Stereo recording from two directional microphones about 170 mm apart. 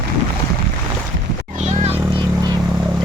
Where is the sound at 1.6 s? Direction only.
40° right (ahead or behind).